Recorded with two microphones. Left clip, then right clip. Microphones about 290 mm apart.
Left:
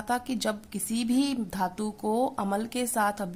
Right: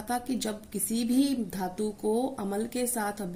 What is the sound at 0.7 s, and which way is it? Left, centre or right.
Speech, left.